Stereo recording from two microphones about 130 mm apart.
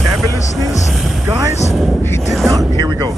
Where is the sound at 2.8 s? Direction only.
35° right (ahead or behind).